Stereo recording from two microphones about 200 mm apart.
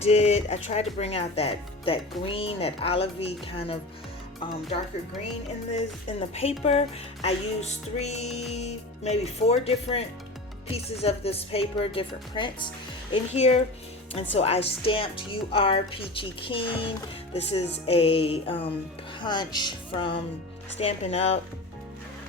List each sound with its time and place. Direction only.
0.0 s speech: 30° left (ahead or behind)
6.1 s speech: 30° left (ahead or behind)